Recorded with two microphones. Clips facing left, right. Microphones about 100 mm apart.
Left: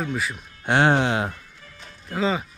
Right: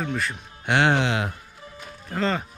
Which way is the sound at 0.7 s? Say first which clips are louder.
Left 2 dB; 40° left (ahead or behind).